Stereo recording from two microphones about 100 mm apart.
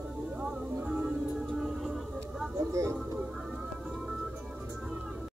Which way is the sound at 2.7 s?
30° right (ahead or behind).